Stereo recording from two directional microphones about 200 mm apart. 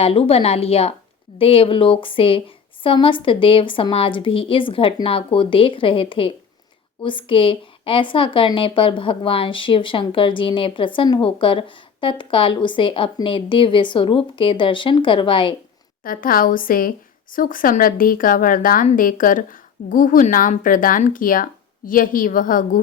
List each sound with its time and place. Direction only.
0.0 s speech: 30° left (ahead or behind)
16.0 s speech: 45° left (ahead or behind)